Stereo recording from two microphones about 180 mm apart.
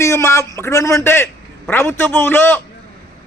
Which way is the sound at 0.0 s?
15° left (ahead or behind).